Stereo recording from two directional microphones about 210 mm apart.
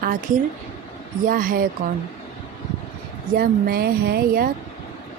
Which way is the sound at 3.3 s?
45° right (ahead or behind).